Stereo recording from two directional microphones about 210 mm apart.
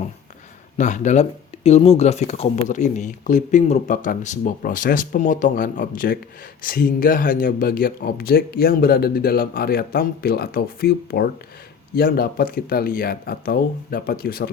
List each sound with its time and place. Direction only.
0.8 s speech: 35° left (ahead or behind)